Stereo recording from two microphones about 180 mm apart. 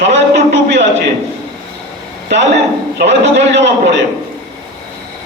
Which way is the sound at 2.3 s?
70° right (ahead or behind).